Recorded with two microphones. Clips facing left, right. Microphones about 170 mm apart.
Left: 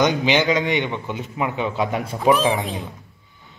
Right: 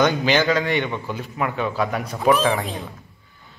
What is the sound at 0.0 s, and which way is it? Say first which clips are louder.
A man's voice: even; 15° left (ahead or behind).